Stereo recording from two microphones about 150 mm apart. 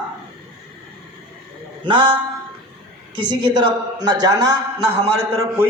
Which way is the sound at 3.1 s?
30° right (ahead or behind).